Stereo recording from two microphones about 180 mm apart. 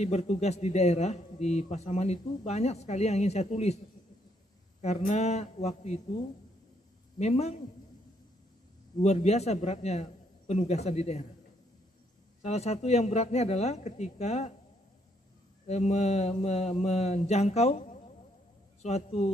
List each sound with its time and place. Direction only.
0.0 s a man's voice: 40° left (ahead or behind)
4.8 s a man's voice: 40° left (ahead or behind)
7.2 s a man's voice: 40° left (ahead or behind)
9.0 s a man's voice: 40° left (ahead or behind)
12.4 s a man's voice: 35° left (ahead or behind)
15.6 s a man's voice: 40° left (ahead or behind)